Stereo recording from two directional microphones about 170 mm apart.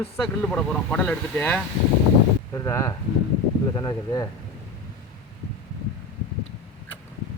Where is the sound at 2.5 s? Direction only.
20° left (ahead or behind).